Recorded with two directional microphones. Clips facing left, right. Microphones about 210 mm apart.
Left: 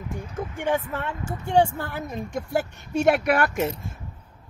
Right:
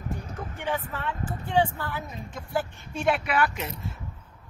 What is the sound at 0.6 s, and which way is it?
Speech, 45° left (ahead or behind).